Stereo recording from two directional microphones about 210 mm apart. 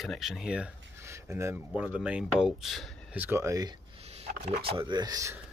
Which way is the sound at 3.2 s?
10° right (ahead or behind).